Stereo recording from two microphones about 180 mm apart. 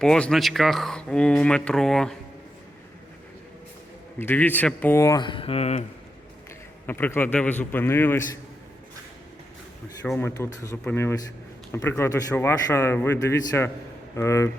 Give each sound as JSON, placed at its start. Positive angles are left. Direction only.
{"t": 0.0, "sound": "speech", "side_deg": 5}
{"t": 4.2, "sound": "a man's voice", "side_deg": 10}
{"t": 6.8, "sound": "a man's voice", "side_deg": 10}
{"t": 10.2, "sound": "a man's voice", "side_deg": 15}